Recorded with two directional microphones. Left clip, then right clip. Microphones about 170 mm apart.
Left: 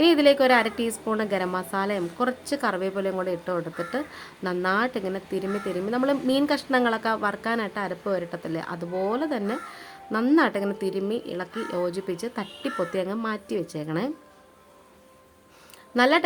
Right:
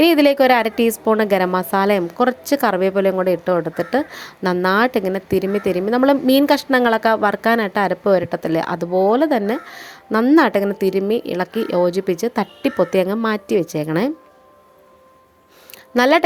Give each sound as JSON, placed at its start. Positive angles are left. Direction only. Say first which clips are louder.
{"t": 0.0, "sound": "speech", "louder": "right 5 dB", "side_deg": -40}
{"t": 16.0, "sound": "a woman's voice", "louder": "right 6 dB", "side_deg": -45}